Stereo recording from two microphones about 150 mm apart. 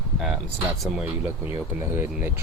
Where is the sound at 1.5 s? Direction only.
15° right (ahead or behind).